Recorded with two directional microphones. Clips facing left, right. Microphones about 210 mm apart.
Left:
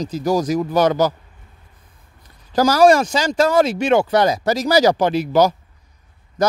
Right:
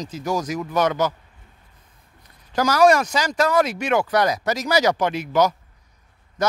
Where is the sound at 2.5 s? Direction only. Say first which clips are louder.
Left 4 dB; 30° left (ahead or behind).